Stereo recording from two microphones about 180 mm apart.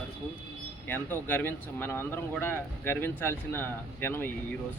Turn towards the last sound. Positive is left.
turn(degrees=10)  # may be behind; listen again after turning